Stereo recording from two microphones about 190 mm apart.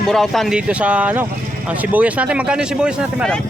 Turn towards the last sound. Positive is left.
turn(degrees=0)  # may be behind; listen again after turning